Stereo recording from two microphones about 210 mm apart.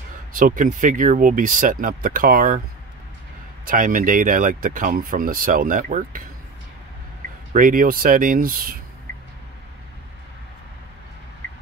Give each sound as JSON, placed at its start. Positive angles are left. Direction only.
{"t": 0.3, "sound": "speech", "side_deg": -40}
{"t": 3.6, "sound": "speech", "side_deg": -40}
{"t": 7.5, "sound": "speech", "side_deg": -40}